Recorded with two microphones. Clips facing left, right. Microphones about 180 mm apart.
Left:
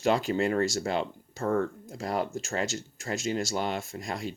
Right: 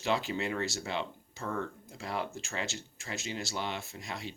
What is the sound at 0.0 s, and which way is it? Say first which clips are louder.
Speech: left 7 dB; 45° left (ahead or behind).